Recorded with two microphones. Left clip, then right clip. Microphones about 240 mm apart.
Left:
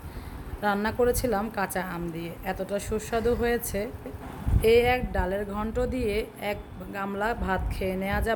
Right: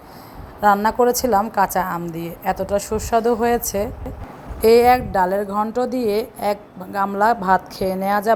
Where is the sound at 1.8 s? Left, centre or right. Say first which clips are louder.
Right 10 dB; centre.